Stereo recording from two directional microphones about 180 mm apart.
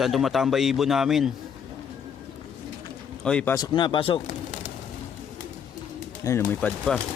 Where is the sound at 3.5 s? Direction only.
25° left (ahead or behind).